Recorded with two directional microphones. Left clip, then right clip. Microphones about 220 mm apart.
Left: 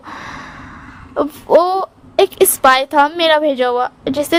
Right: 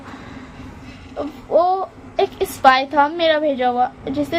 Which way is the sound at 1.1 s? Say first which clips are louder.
Left 6 dB; 55° left (ahead or behind).